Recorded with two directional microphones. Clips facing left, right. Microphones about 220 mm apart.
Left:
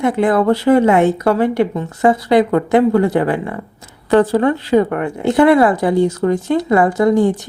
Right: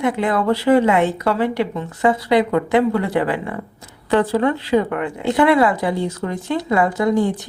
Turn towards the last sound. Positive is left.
turn(degrees=45)  # may be behind; listen again after turning